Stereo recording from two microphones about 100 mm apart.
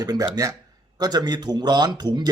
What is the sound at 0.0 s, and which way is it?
A man's voice, 35° right (ahead or behind).